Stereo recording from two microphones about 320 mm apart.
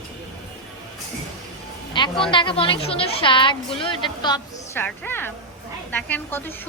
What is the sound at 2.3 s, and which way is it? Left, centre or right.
A woman's voice, centre.